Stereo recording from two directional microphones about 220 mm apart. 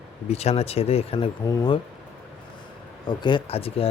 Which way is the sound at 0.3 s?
30° left (ahead or behind).